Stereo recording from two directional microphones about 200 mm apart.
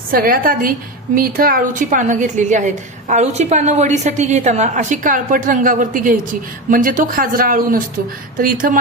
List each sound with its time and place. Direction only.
0.1 s a woman's voice: 45° right (ahead or behind)